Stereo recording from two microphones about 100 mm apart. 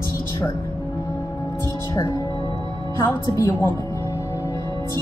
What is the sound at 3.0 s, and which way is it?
Speech, 30° left (ahead or behind).